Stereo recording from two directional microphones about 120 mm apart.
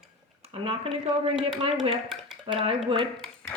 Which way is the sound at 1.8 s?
5° right (ahead or behind).